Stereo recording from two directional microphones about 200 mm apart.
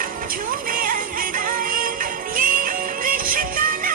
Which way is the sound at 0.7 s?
45° right (ahead or behind).